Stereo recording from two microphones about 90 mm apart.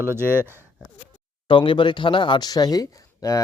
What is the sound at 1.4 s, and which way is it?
Speech, 70° left (ahead or behind).